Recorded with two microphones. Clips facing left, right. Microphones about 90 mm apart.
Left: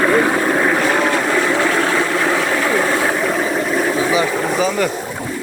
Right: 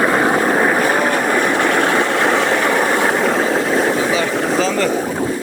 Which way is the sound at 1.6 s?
55° right (ahead or behind).